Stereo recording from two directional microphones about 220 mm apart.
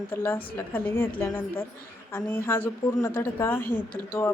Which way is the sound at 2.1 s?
10° left (ahead or behind).